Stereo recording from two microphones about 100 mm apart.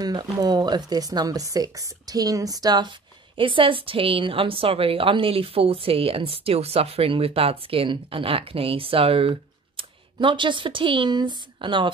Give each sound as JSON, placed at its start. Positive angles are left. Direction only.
{"t": 0.0, "sound": "speech", "side_deg": -45}